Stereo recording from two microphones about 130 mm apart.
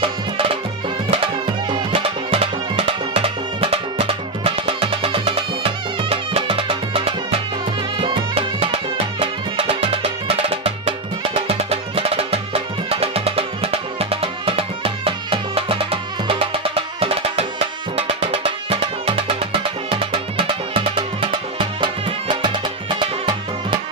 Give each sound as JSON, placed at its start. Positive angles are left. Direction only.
{"t": 0.0, "sound": "music", "side_deg": -45}
{"t": 1.7, "sound": "music", "side_deg": -40}